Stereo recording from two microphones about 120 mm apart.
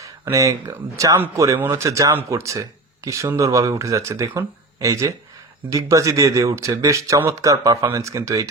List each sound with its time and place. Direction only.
0.0 s speech: 25° right (ahead or behind)